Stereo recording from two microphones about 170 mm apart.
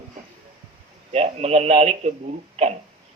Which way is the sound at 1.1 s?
40° right (ahead or behind).